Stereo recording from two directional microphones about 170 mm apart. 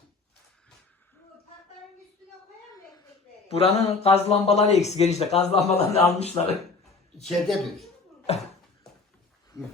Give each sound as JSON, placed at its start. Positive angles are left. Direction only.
{"t": 3.5, "sound": "speech", "side_deg": 35}
{"t": 7.3, "sound": "speech", "side_deg": 0}
{"t": 8.3, "sound": "speech", "side_deg": 40}